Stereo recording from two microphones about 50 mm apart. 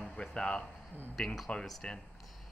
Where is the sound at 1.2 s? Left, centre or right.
Centre.